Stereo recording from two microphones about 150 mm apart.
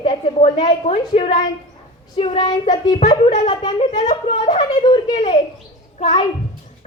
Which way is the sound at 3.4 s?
30° left (ahead or behind).